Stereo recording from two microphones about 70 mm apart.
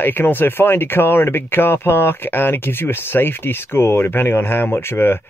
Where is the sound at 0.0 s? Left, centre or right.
Left.